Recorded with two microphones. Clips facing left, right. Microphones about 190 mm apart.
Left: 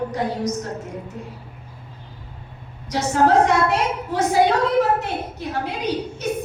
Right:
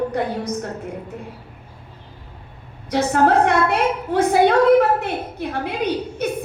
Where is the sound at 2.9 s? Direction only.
60° right (ahead or behind).